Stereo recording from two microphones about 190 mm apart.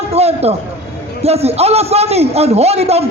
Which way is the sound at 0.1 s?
35° right (ahead or behind).